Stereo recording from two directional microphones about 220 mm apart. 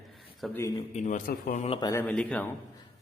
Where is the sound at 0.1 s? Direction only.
Centre (ahead or behind).